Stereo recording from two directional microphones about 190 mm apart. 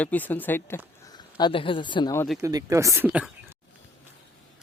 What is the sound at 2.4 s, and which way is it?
Speech, 20° right (ahead or behind).